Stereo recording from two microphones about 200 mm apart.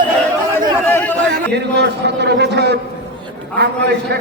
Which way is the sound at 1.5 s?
60° right (ahead or behind).